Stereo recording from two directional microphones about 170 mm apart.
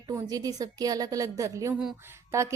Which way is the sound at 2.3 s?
15° right (ahead or behind).